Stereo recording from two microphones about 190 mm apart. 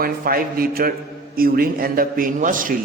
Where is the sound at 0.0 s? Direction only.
50° right (ahead or behind).